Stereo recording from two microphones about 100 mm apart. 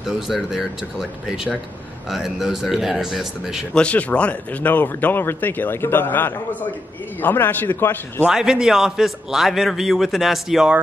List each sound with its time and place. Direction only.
0.0 s a man's voice: 5° right (ahead or behind)
3.7 s speech: 10° left (ahead or behind)
8.3 s a man's voice: 5° right (ahead or behind)